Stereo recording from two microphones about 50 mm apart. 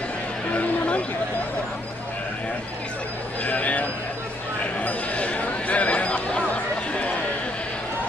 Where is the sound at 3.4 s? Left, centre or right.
Left.